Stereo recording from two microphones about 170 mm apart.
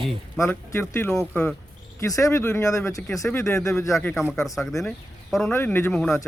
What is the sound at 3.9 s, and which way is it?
A man's voice, centre (ahead or behind).